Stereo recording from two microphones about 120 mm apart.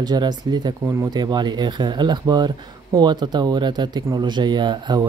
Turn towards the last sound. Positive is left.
turn(degrees=-40)  # may be behind; listen again after turning